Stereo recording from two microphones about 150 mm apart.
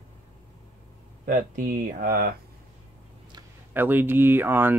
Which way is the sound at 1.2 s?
65° right (ahead or behind).